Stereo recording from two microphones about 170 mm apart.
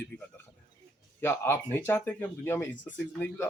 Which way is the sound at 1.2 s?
15° left (ahead or behind).